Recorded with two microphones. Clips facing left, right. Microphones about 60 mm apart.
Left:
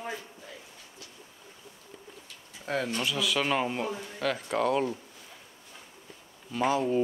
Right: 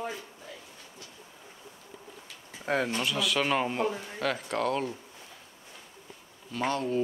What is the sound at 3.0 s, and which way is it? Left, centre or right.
Speech, centre.